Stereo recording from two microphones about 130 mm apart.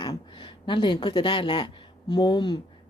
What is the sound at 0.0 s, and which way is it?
A woman's voice, 35° left (ahead or behind).